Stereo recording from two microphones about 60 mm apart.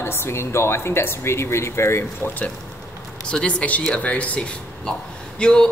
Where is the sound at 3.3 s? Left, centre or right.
Centre.